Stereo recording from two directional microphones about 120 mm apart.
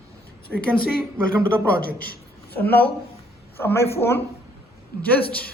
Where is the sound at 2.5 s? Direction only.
15° left (ahead or behind).